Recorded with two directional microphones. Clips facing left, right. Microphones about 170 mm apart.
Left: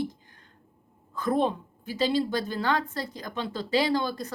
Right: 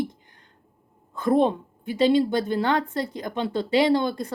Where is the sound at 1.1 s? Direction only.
25° right (ahead or behind).